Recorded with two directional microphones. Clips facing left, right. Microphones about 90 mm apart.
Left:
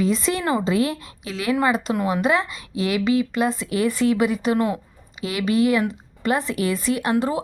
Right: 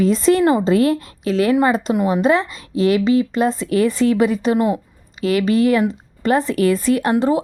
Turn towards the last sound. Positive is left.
turn(degrees=-30)  # may be behind; listen again after turning